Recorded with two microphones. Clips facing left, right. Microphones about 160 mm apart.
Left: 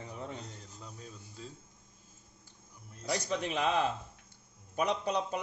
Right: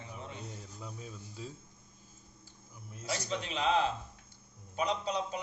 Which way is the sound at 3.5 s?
55° left (ahead or behind).